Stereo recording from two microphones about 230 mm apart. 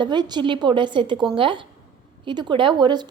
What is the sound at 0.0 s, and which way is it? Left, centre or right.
Speech, centre.